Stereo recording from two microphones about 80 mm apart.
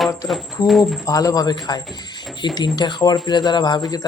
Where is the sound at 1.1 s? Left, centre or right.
Left.